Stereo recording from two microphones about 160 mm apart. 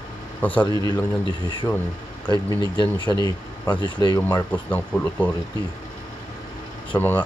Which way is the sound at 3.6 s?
30° left (ahead or behind).